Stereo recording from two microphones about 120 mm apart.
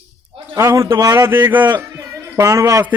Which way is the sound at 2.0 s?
25° right (ahead or behind).